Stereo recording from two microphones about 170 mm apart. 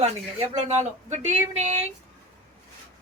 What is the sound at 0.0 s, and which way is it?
Speech, 40° right (ahead or behind).